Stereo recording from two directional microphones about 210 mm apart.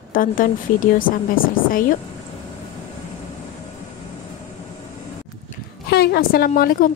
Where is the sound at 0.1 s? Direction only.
40° left (ahead or behind).